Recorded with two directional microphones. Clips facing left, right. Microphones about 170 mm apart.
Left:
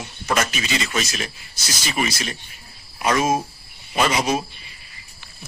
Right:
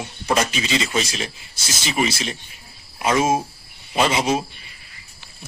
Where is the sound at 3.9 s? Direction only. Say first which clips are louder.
Right 1 dB; 25° right (ahead or behind).